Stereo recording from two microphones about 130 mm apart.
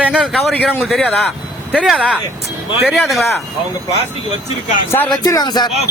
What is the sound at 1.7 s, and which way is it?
A man's voice, 5° right (ahead or behind).